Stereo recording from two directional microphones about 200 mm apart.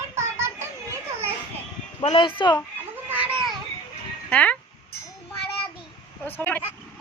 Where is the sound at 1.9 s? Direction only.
25° left (ahead or behind).